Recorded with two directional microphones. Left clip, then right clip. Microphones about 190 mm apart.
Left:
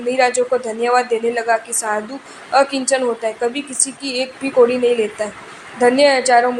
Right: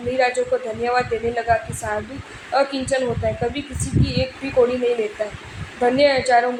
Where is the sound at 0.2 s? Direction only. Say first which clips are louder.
Left 3 dB; 35° left (ahead or behind).